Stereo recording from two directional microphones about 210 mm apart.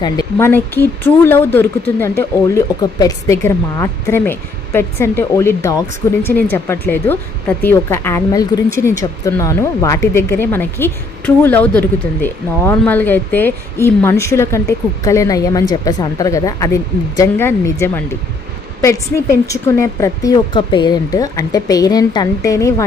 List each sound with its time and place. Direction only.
0.0 s speech: 15° left (ahead or behind)